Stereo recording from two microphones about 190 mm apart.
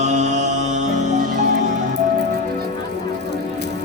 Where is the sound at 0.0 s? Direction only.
40° right (ahead or behind).